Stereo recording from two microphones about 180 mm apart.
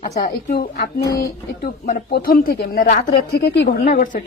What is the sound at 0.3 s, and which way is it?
A woman's voice, 50° left (ahead or behind).